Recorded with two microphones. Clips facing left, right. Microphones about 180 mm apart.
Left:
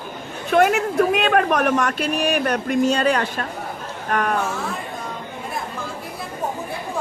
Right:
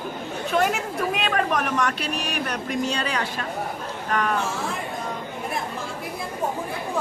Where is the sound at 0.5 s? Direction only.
65° left (ahead or behind).